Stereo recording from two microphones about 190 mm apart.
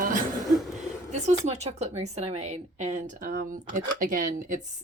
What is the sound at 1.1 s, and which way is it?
A woman's voice, 35° right (ahead or behind).